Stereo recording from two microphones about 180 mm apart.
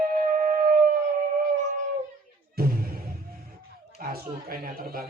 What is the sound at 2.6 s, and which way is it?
Music, 55° right (ahead or behind).